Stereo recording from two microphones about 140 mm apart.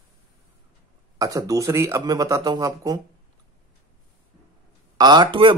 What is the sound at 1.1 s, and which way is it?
Speech, 25° right (ahead or behind).